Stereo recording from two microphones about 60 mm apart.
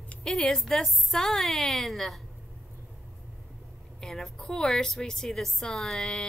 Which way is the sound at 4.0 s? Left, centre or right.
Centre.